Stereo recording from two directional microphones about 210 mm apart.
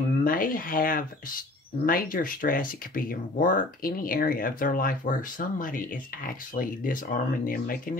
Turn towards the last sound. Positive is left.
turn(degrees=40)  # may be behind; listen again after turning